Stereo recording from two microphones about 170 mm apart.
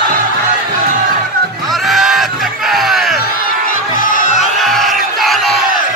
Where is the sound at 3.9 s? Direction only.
50° left (ahead or behind).